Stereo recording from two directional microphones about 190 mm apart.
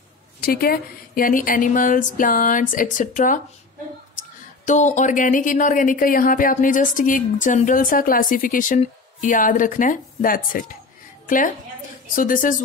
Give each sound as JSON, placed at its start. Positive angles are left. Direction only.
{"t": 0.4, "sound": "a woman's voice", "side_deg": 55}